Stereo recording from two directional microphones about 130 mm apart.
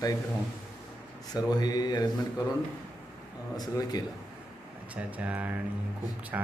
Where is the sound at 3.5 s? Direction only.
30° left (ahead or behind).